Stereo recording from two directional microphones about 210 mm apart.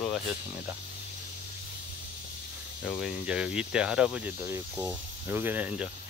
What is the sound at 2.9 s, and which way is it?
Speech, centre (ahead or behind).